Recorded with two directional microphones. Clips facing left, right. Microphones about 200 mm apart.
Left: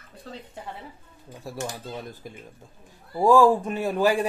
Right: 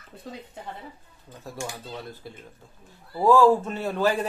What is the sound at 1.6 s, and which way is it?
A man's voice, 15° left (ahead or behind).